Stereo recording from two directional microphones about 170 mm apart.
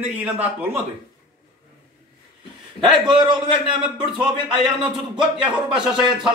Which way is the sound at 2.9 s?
25° right (ahead or behind).